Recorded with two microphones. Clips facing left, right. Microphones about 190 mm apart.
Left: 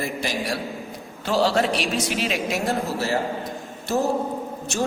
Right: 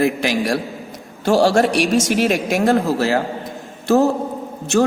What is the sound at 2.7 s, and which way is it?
Speech, 90° right.